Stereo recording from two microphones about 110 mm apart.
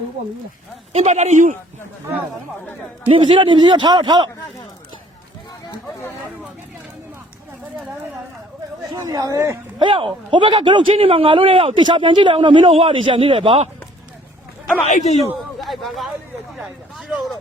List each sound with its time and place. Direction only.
0.9 s a man's voice: 90° right
3.1 s a man's voice: 50° right (ahead or behind)
8.9 s speech: 35° right (ahead or behind)
9.7 s a man's voice: 50° right (ahead or behind)
14.8 s a man's voice: 90° left
15.6 s a sound: centre (ahead or behind)